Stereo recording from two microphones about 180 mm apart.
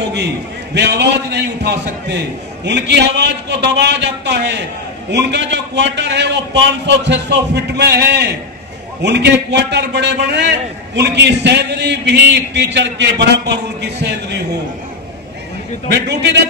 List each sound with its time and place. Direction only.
0.0 s a man's voice: 75° right (ahead or behind)
15.9 s a man's voice: 70° right (ahead or behind)